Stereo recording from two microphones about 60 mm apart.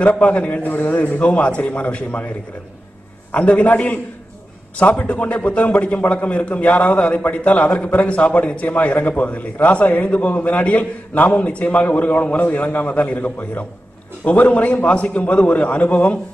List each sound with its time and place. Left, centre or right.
0.0 s a man's voice: left
3.3 s a man's voice: left